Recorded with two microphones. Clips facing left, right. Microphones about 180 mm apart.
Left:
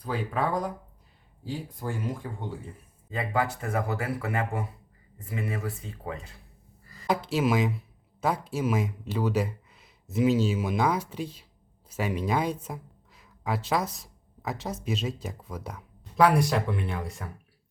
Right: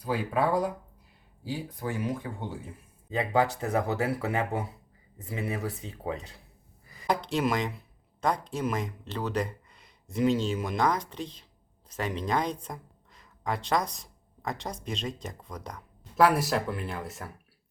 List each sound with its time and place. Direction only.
0.0 s speech: 10° right (ahead or behind)
3.1 s speech: 20° right (ahead or behind)
6.8 s a sound: 15° right (ahead or behind)
7.1 s speech: 5° left (ahead or behind)